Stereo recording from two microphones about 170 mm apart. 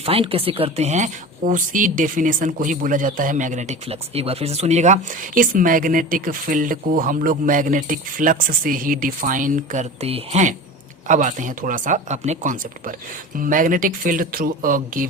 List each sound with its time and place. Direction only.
0.0 s speech: 35° right (ahead or behind); by 9.8 s 50° right (ahead or behind)
10.0 s speech: 40° right (ahead or behind)